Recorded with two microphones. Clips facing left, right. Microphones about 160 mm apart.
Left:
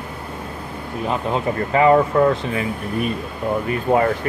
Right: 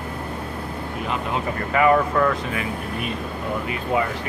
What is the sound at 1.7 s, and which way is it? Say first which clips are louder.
Speech: left 3 dB; 30° left (ahead or behind).